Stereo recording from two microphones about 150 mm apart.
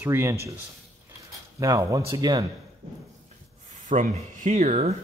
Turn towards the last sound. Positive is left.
turn(degrees=-50)  # may be behind; listen again after turning